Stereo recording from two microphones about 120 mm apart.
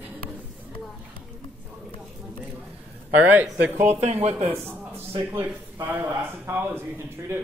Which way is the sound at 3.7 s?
75° right (ahead or behind).